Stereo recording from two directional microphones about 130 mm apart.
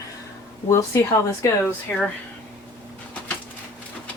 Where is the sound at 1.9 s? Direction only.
10° left (ahead or behind).